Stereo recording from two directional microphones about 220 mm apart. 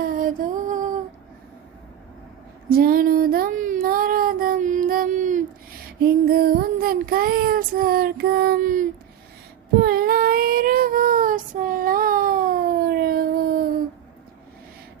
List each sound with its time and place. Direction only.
0.0 s music: 40° right (ahead or behind)
2.6 s child singing: 40° right (ahead or behind)